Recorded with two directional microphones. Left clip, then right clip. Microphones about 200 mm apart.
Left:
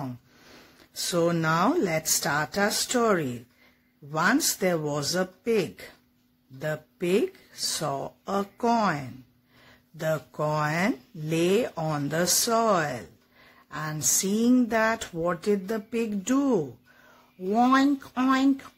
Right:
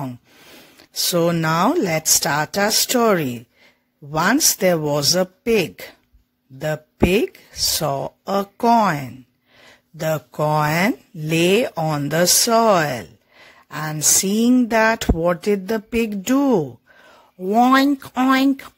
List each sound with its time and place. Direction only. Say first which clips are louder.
0.9 s speech: right 7 dB; 45° right (ahead or behind)